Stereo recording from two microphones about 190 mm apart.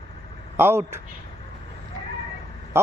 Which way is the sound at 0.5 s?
10° right (ahead or behind).